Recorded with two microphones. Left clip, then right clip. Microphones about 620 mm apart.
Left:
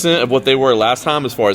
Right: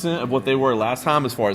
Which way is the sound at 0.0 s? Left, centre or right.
Centre.